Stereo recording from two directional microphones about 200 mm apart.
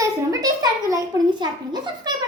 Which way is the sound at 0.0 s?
15° right (ahead or behind).